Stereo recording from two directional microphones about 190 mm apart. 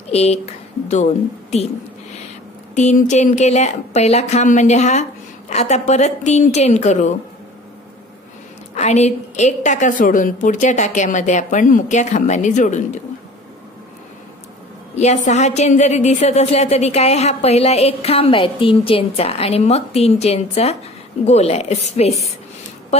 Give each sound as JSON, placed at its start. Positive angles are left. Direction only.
{"t": 0.1, "sound": "a woman's voice", "side_deg": 35}
{"t": 2.7, "sound": "a woman's voice", "side_deg": 40}
{"t": 8.7, "sound": "a woman's voice", "side_deg": 35}
{"t": 15.0, "sound": "a woman's voice", "side_deg": 35}